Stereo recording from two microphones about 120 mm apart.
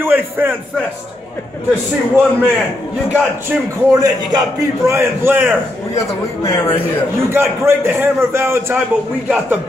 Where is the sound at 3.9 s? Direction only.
30° right (ahead or behind).